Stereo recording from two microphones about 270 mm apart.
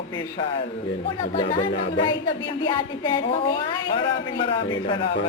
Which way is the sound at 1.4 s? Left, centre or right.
Centre.